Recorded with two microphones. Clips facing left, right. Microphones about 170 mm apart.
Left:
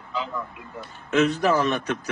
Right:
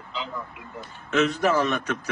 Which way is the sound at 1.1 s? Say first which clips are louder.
Left 1 dB; 35° left (ahead or behind).